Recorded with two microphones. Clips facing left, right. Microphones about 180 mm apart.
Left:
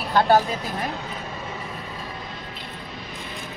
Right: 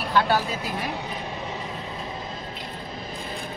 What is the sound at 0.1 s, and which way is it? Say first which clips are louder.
Speech: left 4 dB; 45° left (ahead or behind).